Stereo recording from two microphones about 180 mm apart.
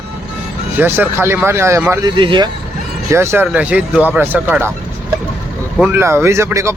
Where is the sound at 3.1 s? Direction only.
15° right (ahead or behind).